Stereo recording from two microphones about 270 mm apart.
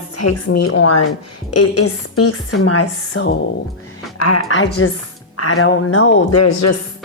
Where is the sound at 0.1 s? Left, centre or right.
Left.